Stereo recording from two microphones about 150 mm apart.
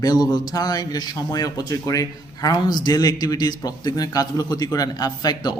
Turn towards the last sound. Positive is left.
turn(degrees=25)  # may be behind; listen again after turning